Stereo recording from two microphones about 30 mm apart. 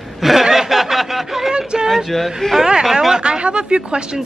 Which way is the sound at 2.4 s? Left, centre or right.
Left.